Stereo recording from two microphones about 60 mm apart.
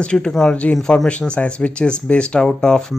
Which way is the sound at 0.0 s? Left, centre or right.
Centre.